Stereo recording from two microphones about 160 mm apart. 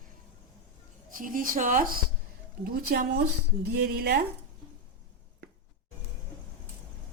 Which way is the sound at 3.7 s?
85° right.